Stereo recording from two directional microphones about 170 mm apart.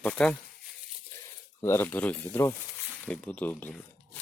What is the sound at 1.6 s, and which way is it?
Speech, 15° left (ahead or behind).